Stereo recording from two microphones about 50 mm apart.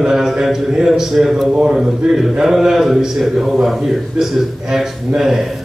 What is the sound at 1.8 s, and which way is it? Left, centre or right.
A man's voice, centre.